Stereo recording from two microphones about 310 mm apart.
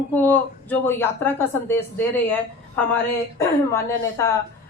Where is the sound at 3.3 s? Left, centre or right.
Centre.